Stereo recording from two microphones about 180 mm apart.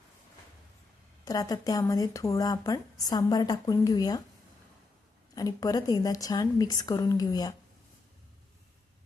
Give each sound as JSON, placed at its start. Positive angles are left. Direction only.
{"t": 1.2, "sound": "speech", "side_deg": 20}
{"t": 5.3, "sound": "speech", "side_deg": 20}